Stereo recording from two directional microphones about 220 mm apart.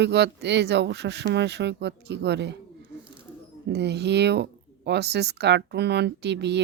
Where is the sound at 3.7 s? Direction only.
50° right (ahead or behind).